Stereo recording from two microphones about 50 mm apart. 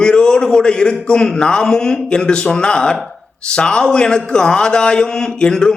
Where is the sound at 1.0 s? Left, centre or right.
Centre.